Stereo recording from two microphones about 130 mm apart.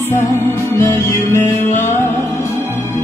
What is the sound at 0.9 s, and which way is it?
Music, 15° left (ahead or behind).